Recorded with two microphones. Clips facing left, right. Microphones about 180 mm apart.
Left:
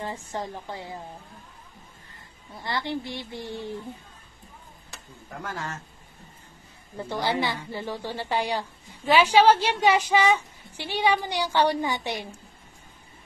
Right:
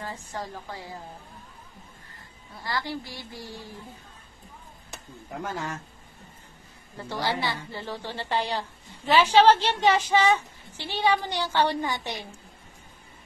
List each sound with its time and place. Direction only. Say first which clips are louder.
0.3 s a woman's voice: left 3 dB; 25° left (ahead or behind)
2.6 s a woman's voice: left 2 dB; 20° left (ahead or behind)
4.9 s speech: right 3 dB; 20° right (ahead or behind)
7.0 s a woman's voice: left 2 dB; 20° left (ahead or behind)